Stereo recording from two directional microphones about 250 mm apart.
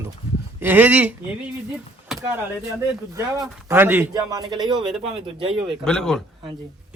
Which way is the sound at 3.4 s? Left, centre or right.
Centre.